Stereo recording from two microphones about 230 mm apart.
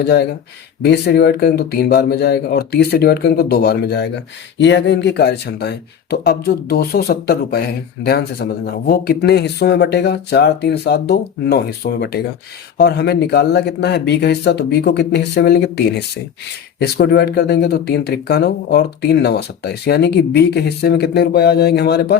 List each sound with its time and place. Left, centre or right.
0.0 s speech: left